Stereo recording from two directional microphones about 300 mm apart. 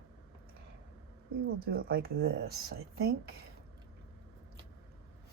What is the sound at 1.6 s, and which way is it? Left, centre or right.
Speech, right.